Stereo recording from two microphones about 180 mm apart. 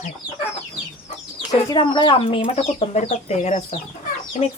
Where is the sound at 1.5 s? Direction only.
25° left (ahead or behind).